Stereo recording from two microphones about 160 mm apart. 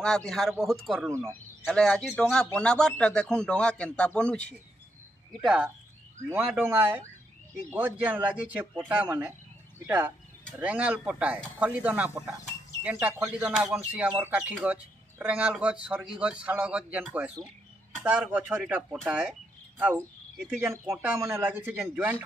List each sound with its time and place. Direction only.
0.0 s a man's voice: 5° left (ahead or behind)
5.4 s a man's voice: 5° right (ahead or behind)
18.0 s speech: 10° right (ahead or behind)
20.6 s speech: 15° right (ahead or behind)